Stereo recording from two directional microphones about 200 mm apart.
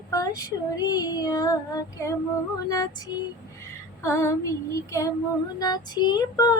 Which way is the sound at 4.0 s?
15° left (ahead or behind).